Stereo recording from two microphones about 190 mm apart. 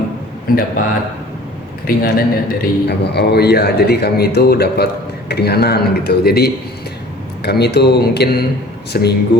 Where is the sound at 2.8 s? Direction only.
60° left (ahead or behind).